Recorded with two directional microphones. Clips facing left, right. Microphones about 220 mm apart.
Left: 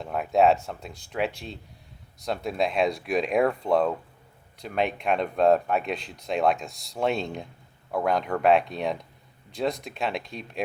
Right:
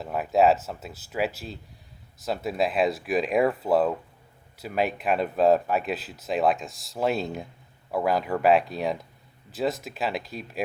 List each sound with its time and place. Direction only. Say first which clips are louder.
0.0 s speech: even; centre (ahead or behind)